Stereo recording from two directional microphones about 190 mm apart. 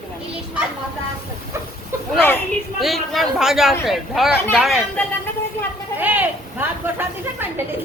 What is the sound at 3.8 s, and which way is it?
Speech, centre (ahead or behind).